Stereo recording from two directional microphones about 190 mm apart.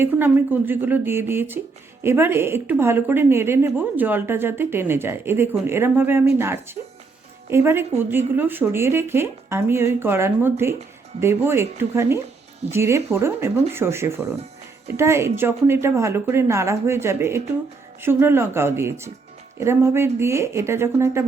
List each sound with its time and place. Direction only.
0.0 s a woman's voice: 10° right (ahead or behind)